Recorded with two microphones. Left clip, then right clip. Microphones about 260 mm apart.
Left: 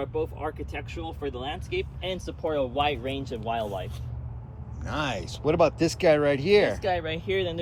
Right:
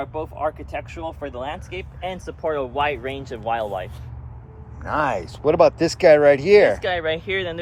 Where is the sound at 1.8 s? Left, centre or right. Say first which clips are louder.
Right 2 dB; centre.